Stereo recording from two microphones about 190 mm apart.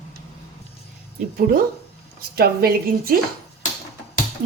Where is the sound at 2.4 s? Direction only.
50° right (ahead or behind).